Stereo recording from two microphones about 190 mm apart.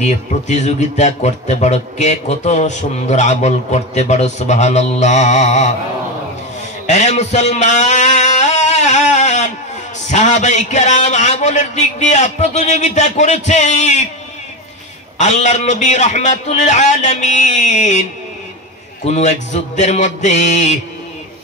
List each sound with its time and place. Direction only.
0.0 s a man's voice: 35° left (ahead or behind)
6.9 s music: 35° left (ahead or behind)
10.0 s a man's voice: 40° left (ahead or behind)
15.1 s a man's voice: 40° left (ahead or behind)
19.0 s a man's voice: 35° left (ahead or behind)